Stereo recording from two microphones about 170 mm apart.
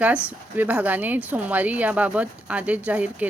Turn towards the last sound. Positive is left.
turn(degrees=-10)  # may be behind; listen again after turning